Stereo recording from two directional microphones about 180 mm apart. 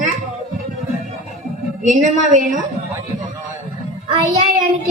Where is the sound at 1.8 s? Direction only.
45° right (ahead or behind).